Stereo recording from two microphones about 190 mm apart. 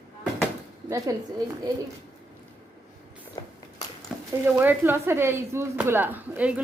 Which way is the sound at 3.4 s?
20° left (ahead or behind).